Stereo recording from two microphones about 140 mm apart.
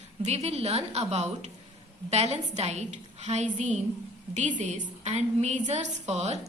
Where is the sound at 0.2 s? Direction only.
50° right (ahead or behind).